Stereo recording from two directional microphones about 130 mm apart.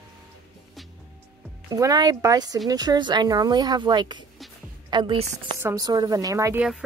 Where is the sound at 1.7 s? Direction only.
30° right (ahead or behind).